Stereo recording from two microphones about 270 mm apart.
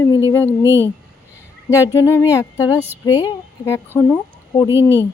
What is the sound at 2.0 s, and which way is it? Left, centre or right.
Speech, centre.